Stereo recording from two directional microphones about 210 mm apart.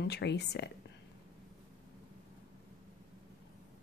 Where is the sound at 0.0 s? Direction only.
55° left (ahead or behind).